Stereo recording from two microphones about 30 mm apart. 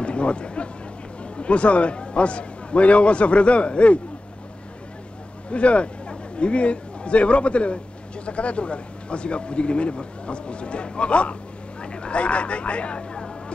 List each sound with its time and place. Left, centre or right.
0.0 s a sound: left
1.4 s speech: left
5.5 s a man's voice: left